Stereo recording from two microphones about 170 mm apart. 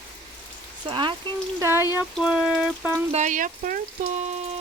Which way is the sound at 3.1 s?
50° right (ahead or behind).